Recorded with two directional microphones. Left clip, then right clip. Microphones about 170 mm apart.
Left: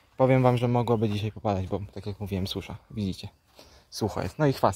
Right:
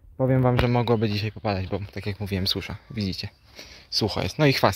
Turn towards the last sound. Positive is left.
turn(degrees=-10)  # may be behind; listen again after turning